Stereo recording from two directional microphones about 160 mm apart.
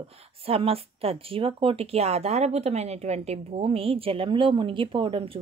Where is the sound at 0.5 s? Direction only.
35° right (ahead or behind).